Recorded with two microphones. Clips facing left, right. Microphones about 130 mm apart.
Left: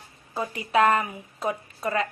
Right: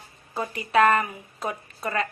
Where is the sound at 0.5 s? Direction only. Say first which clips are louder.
Right 1 dB; 20° left (ahead or behind).